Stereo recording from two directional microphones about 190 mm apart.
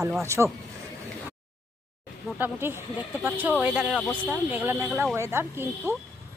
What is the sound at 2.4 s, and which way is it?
Speech, 10° right (ahead or behind).